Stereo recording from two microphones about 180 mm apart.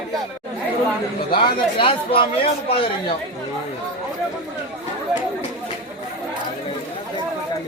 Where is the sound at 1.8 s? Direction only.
30° left (ahead or behind).